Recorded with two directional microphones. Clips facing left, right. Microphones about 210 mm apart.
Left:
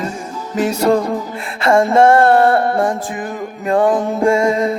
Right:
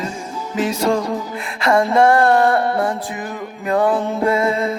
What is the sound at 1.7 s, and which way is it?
Music, 50° left (ahead or behind).